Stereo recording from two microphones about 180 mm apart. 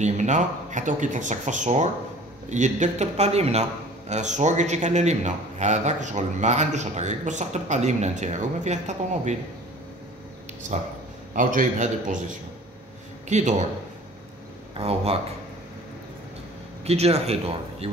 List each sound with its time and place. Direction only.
0.0 s a man's voice: 40° right (ahead or behind)
11.3 s speech: 45° right (ahead or behind)
13.3 s a man's voice: 40° right (ahead or behind)
14.8 s a man's voice: 35° right (ahead or behind)
16.8 s a man's voice: 35° right (ahead or behind)